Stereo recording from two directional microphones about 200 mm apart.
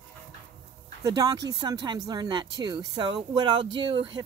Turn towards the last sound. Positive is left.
turn(degrees=-25)  # may be behind; listen again after turning